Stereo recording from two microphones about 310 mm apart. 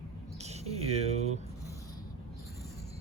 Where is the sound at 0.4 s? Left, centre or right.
Right.